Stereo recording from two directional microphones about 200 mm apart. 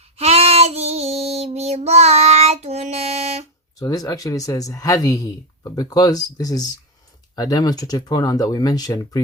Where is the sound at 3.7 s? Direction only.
20° left (ahead or behind).